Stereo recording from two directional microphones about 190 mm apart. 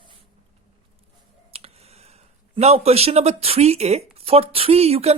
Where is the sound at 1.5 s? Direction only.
35° right (ahead or behind).